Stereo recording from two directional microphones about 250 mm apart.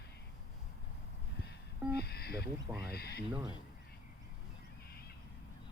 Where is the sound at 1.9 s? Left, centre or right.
Left.